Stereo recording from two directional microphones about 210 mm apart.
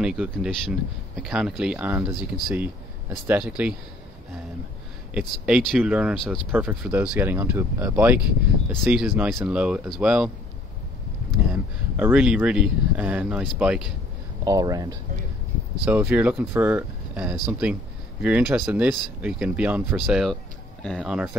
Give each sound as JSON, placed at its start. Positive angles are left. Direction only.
{"t": 0.0, "sound": "speech", "side_deg": -5}
{"t": 5.1, "sound": "speech", "side_deg": -5}
{"t": 11.4, "sound": "speech", "side_deg": -5}
{"t": 14.4, "sound": "speech", "side_deg": -15}
{"t": 15.8, "sound": "speech", "side_deg": -5}